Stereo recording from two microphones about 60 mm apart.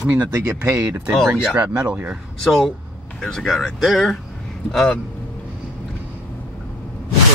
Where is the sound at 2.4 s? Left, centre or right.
Centre.